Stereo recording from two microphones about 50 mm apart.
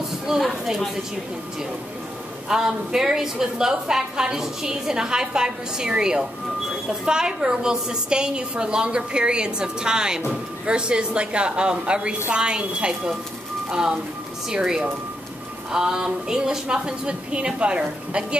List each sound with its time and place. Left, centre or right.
0.3 s speech: centre
2.4 s a woman's voice: centre